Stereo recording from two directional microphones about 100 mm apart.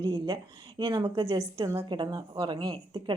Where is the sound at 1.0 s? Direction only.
70° right (ahead or behind).